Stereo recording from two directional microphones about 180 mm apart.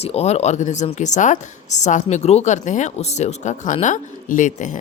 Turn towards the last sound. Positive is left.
turn(degrees=45)  # may be behind; listen again after turning